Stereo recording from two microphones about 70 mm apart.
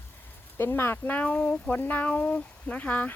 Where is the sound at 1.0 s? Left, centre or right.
Left.